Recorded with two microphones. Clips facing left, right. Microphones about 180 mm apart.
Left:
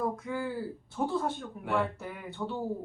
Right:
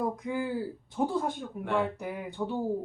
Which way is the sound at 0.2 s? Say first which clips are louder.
Right 2 dB; 15° right (ahead or behind).